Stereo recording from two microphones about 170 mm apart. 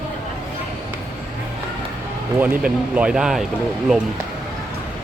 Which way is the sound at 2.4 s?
10° right (ahead or behind).